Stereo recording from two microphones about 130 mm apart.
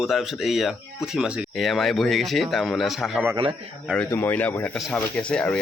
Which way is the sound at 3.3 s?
40° right (ahead or behind).